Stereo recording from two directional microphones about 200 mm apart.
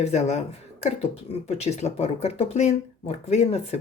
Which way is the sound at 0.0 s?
35° left (ahead or behind).